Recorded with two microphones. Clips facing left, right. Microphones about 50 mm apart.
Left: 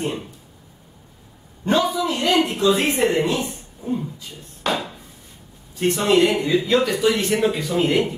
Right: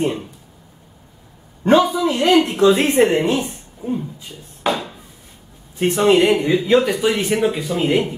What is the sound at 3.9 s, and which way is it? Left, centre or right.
Speech, centre.